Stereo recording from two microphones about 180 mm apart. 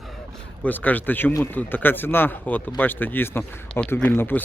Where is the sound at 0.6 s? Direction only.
10° left (ahead or behind).